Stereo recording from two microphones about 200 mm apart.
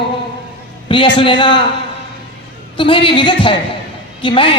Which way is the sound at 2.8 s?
25° left (ahead or behind).